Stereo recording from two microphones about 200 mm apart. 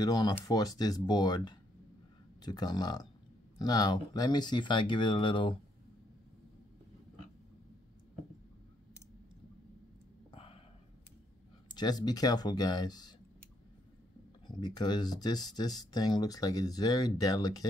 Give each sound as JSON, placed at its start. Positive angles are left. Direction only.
{"t": 0.0, "sound": "speech", "side_deg": 20}
{"t": 10.3, "sound": "a sound", "side_deg": 30}
{"t": 11.7, "sound": "speech", "side_deg": 20}
{"t": 14.6, "sound": "speech", "side_deg": 20}